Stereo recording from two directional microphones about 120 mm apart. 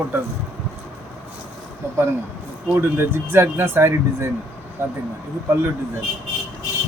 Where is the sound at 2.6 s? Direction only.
20° right (ahead or behind).